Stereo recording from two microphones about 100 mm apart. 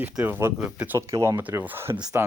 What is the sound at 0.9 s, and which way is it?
Speech, 30° right (ahead or behind).